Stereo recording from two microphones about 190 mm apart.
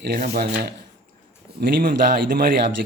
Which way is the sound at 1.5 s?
50° right (ahead or behind).